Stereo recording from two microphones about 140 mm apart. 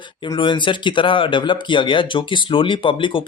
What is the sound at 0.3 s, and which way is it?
Speech, 35° left (ahead or behind).